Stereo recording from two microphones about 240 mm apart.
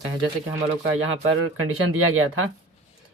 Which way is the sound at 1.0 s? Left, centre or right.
Right.